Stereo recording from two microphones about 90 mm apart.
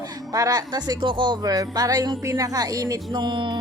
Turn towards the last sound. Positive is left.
turn(degrees=-55)  # may be behind; listen again after turning